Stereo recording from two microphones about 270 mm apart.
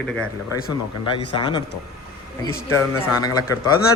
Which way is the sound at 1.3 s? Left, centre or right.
Centre.